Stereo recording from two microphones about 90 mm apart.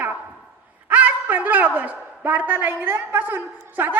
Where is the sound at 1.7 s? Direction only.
20° right (ahead or behind).